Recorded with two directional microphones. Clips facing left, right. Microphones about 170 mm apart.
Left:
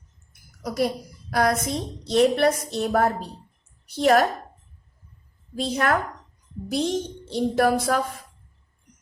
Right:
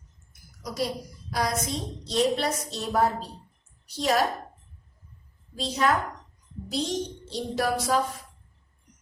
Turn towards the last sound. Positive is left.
turn(degrees=55)  # may be behind; listen again after turning